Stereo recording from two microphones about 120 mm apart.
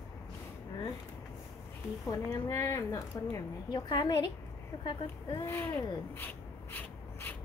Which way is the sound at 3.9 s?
40° left (ahead or behind).